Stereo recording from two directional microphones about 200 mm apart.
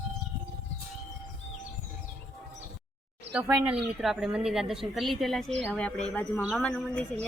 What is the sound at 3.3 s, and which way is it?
Speech, 5° right (ahead or behind).